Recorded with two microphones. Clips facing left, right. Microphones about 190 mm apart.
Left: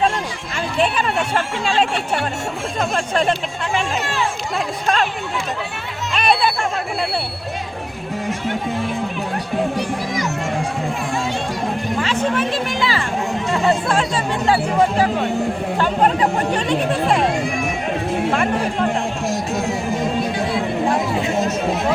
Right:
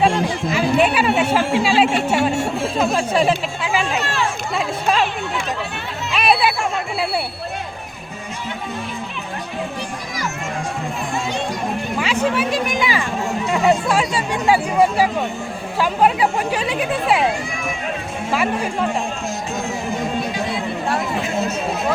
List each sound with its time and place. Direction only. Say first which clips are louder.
0.5 s speech: right 3 dB; 5° right (ahead or behind)
4.0 s a sound: even; 15° left (ahead or behind)
6.1 s music: right 1 dB; 5° right (ahead or behind)
11.9 s a sound: right 1 dB; 10° right (ahead or behind)
13.5 s speech: right 2 dB; 10° right (ahead or behind)
18.3 s speech: right 2 dB; 5° right (ahead or behind)